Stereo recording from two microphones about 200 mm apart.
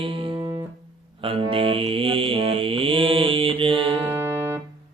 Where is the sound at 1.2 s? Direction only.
25° right (ahead or behind).